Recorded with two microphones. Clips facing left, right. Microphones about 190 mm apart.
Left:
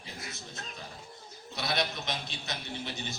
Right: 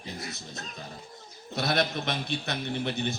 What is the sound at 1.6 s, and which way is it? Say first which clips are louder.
A man's voice: right 5 dB; 50° right (ahead or behind).